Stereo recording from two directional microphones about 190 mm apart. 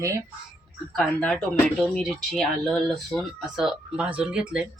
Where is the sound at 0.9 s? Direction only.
5° left (ahead or behind).